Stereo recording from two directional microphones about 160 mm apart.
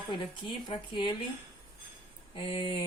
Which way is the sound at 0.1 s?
30° left (ahead or behind).